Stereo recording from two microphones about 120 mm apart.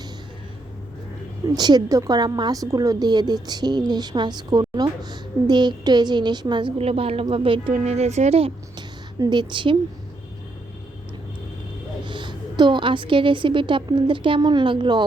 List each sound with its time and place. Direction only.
1.5 s a woman's voice: 35° right (ahead or behind)
7.7 s a woman's voice: 65° right (ahead or behind)
9.1 s a woman's voice: 35° right (ahead or behind)
12.0 s a woman's voice: 40° right (ahead or behind)